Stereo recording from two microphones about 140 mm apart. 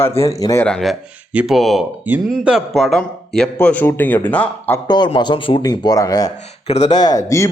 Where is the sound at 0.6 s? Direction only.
5° left (ahead or behind).